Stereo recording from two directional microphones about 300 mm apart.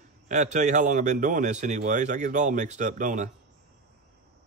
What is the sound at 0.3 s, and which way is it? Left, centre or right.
A man's voice, right.